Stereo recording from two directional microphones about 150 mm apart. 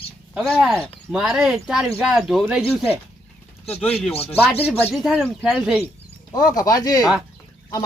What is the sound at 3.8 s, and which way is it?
Speech, 5° left (ahead or behind).